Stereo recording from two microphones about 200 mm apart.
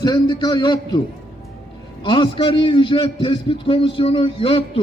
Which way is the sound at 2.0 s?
25° left (ahead or behind).